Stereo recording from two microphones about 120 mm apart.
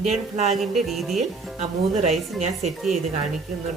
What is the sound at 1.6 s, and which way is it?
Speech, 80° right.